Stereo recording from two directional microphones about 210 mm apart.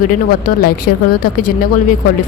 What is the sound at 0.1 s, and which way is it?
Speech, 45° left (ahead or behind).